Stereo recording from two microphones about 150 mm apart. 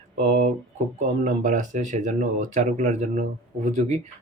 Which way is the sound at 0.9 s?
55° right (ahead or behind).